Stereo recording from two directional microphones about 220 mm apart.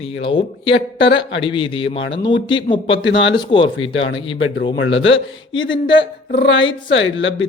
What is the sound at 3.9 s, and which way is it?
Speech, 60° left (ahead or behind).